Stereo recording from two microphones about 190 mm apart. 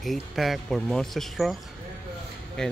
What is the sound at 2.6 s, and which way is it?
Speech, 5° left (ahead or behind).